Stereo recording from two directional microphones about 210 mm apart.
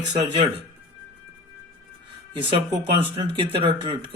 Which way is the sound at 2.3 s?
25° right (ahead or behind).